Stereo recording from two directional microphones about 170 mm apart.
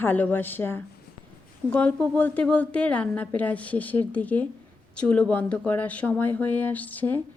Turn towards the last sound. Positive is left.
turn(degrees=10)  # may be behind; listen again after turning